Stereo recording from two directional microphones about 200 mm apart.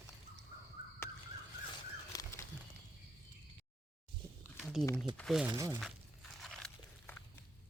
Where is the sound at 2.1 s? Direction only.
15° left (ahead or behind).